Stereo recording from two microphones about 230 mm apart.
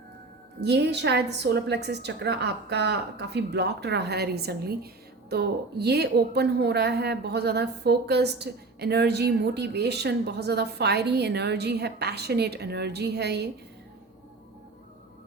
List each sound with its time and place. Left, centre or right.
0.6 s a woman's voice: right